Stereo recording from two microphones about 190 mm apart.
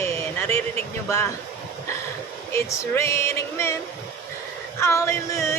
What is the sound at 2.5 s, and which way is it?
Speech, 15° left (ahead or behind).